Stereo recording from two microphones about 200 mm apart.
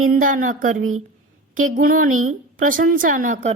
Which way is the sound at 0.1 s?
45° right (ahead or behind).